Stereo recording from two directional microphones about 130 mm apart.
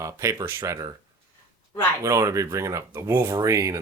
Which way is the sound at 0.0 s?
25° right (ahead or behind).